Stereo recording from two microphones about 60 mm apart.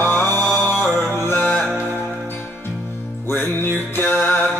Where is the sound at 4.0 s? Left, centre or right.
Left.